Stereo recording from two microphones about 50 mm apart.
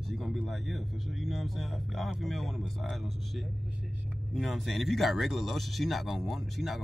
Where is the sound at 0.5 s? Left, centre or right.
Centre.